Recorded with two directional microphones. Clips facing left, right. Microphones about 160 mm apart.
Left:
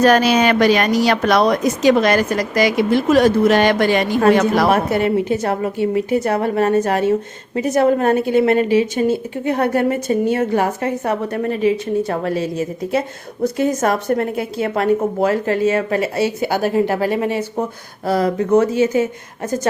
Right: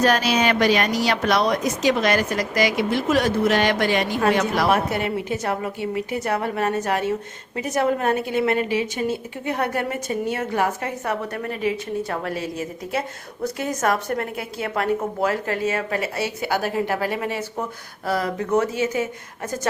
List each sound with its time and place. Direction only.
0.0 s a woman's voice: 55° left (ahead or behind); by 19.0 s 30° left (ahead or behind)